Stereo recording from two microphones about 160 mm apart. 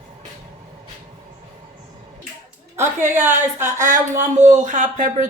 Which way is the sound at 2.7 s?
45° right (ahead or behind).